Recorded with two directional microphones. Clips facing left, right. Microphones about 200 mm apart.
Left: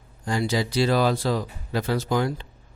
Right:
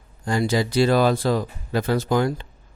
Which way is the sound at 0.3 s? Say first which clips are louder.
Right 3 dB; 50° right (ahead or behind).